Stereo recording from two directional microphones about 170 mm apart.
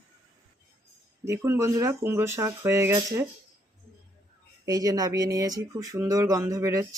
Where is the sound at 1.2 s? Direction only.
15° right (ahead or behind).